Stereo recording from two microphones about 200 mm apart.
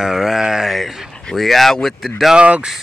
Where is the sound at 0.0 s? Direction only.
Centre (ahead or behind).